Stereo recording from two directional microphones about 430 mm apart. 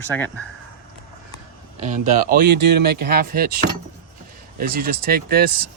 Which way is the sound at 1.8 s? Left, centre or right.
Centre.